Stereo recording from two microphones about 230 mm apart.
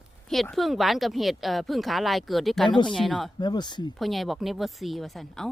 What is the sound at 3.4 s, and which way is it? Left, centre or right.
Speech, centre.